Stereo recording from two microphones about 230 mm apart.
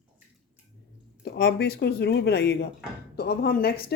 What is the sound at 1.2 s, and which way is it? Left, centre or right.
Speech, left.